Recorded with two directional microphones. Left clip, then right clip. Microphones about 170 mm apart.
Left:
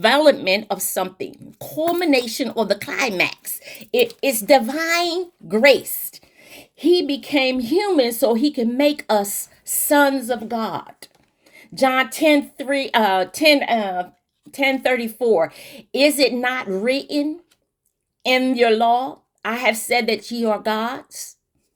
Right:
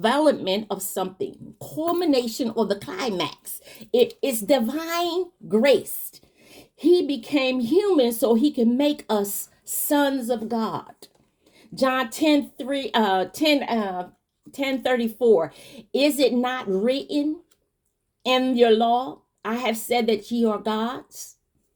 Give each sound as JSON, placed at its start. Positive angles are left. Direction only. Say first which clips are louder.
{"t": 0.4, "sound": "a woman's voice", "louder": "left 6 dB", "side_deg": 15}